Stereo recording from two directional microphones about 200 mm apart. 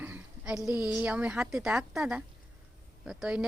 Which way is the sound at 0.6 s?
20° left (ahead or behind).